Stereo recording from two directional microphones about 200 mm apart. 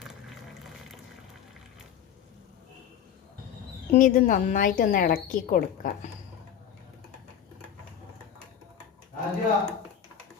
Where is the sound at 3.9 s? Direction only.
40° left (ahead or behind).